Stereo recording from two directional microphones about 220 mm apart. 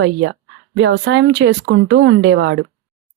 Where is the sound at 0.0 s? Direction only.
55° right (ahead or behind).